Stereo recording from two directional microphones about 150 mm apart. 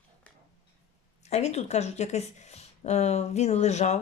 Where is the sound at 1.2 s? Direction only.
45° left (ahead or behind).